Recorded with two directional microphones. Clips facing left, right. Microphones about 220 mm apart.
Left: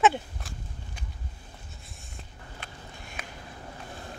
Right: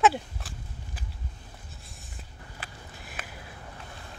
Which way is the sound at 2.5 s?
5° right (ahead or behind).